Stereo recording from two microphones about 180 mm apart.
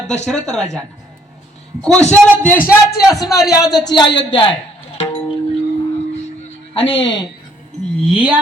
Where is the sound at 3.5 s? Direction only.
20° left (ahead or behind).